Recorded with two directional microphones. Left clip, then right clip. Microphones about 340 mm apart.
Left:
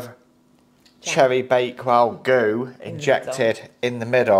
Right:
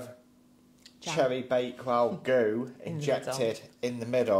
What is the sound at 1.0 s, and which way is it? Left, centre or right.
Speech, left.